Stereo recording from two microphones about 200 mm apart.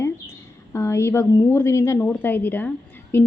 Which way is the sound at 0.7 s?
15° left (ahead or behind).